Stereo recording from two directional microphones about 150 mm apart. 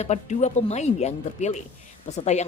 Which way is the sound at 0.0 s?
50° left (ahead or behind).